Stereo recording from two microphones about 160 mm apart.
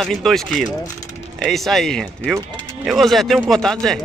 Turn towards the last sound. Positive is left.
turn(degrees=5)  # may be behind; listen again after turning